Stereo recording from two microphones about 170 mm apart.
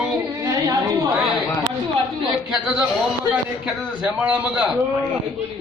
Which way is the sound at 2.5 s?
5° right (ahead or behind).